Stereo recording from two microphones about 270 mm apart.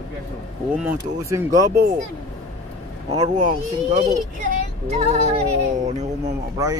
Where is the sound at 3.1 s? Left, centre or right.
Right.